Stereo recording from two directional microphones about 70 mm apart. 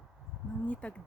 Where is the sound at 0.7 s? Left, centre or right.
Centre.